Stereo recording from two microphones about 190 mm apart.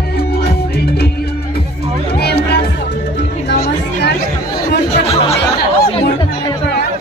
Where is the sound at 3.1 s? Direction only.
60° left (ahead or behind).